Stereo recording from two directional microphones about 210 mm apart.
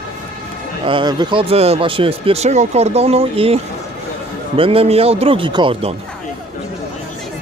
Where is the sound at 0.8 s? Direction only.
20° right (ahead or behind).